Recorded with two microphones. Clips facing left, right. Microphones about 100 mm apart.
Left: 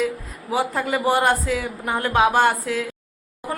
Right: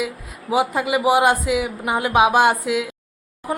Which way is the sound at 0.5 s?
15° right (ahead or behind).